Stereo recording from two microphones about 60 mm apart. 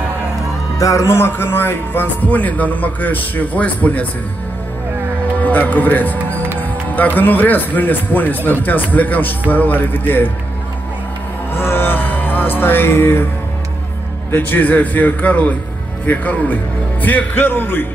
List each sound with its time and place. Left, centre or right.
0.7 s speech: left
1.1 s a man's voice: left
2.2 s a man's voice: left
5.4 s a man's voice: left
11.5 s music: left
14.3 s a man's voice: left